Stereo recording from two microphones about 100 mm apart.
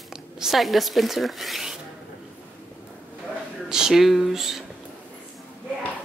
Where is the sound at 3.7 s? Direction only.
5° right (ahead or behind).